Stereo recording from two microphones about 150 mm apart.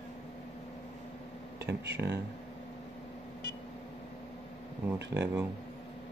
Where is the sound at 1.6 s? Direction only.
90° right.